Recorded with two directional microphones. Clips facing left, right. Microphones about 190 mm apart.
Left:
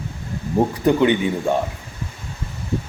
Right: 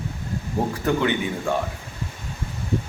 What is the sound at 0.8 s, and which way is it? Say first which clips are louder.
Speech: left 6 dB; 20° left (ahead or behind).